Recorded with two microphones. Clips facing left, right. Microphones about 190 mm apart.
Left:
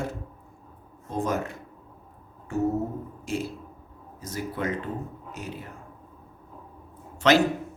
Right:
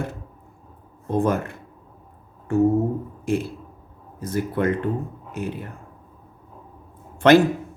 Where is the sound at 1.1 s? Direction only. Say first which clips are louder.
Right 6 dB; 55° right (ahead or behind).